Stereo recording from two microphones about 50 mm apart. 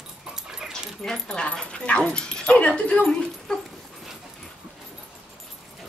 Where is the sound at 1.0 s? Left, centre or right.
Centre.